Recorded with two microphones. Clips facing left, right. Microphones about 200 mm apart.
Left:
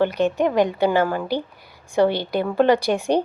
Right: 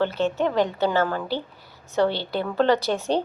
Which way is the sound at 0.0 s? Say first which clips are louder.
Left 3 dB; 15° left (ahead or behind).